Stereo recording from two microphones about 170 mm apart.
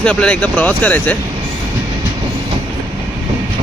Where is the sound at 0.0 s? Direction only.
5° left (ahead or behind).